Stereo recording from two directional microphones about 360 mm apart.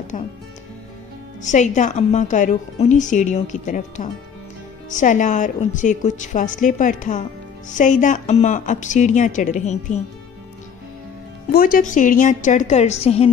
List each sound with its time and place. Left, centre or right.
0.1 s a woman's voice: centre
1.4 s a woman's voice: centre
11.5 s a woman's voice: left